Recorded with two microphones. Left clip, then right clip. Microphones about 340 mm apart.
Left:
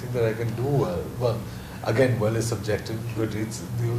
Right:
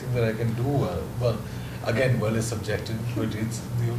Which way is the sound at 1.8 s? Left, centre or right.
Left.